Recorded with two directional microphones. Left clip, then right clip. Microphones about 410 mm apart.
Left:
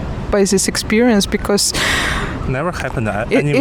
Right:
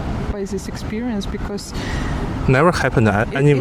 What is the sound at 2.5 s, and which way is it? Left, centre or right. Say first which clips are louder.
Speech: right 8 dB; right.